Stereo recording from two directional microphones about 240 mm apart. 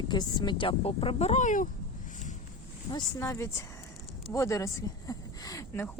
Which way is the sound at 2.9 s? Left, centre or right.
Centre.